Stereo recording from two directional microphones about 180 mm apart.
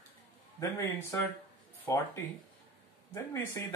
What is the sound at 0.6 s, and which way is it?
Speech, 15° left (ahead or behind).